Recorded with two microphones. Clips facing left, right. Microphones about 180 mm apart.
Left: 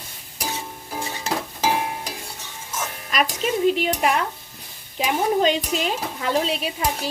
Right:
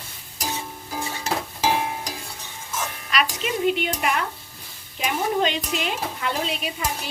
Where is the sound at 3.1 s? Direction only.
40° left (ahead or behind).